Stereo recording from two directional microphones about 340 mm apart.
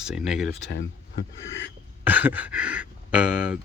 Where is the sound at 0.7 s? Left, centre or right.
Left.